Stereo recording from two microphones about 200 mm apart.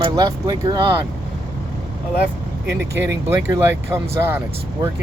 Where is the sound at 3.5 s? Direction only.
10° right (ahead or behind).